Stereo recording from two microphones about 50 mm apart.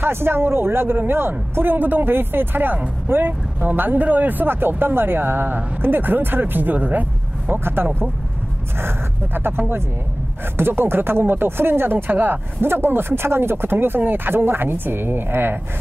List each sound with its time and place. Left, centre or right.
0.0 s speech: right
7.6 s speech: right